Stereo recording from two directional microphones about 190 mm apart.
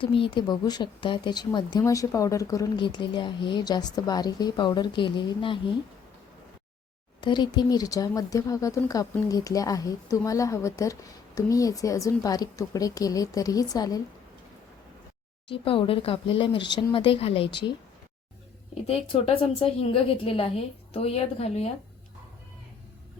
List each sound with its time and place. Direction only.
0.0 s speech: 25° left (ahead or behind)
7.2 s speech: 25° left (ahead or behind)
15.4 s speech: 30° left (ahead or behind)
18.7 s a woman's voice: 35° left (ahead or behind)